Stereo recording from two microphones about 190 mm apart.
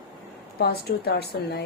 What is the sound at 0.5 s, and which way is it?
A woman's voice, 55° left (ahead or behind).